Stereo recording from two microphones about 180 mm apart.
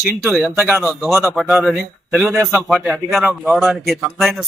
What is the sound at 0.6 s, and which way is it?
Speech, 15° right (ahead or behind).